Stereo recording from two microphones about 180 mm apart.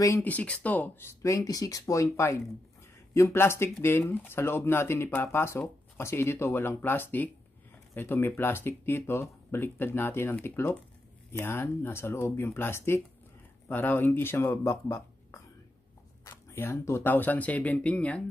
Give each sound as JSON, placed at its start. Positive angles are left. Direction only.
{"t": 0.0, "sound": "speech", "side_deg": 15}
{"t": 16.3, "sound": "speech", "side_deg": 15}